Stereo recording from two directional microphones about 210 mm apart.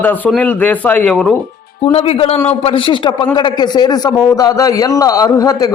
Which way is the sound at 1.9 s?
30° left (ahead or behind).